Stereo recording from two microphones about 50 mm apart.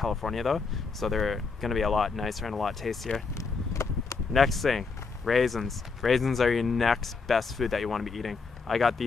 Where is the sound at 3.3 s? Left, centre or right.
Left.